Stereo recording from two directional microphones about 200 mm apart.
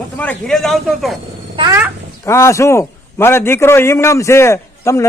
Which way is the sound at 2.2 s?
15° left (ahead or behind).